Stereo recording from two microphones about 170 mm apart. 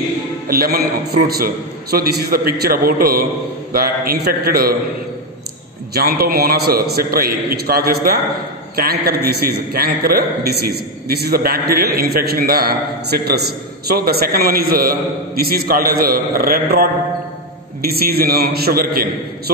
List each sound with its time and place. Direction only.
0.5 s a man's voice: 60° right (ahead or behind)
5.9 s a man's voice: 65° right (ahead or behind)